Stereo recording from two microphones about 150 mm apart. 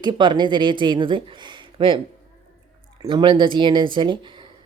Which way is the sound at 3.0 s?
30° right (ahead or behind).